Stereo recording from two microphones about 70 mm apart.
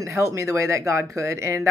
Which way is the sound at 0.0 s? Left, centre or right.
Right.